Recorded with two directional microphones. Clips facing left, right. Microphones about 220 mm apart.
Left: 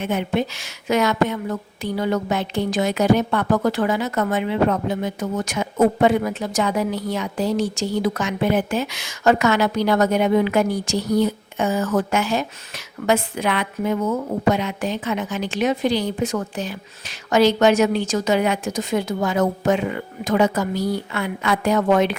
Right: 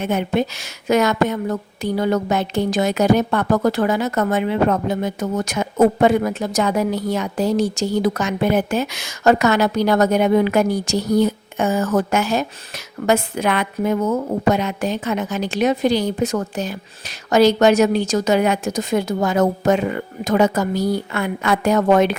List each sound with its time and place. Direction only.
0.0 s a woman's voice: 45° right (ahead or behind)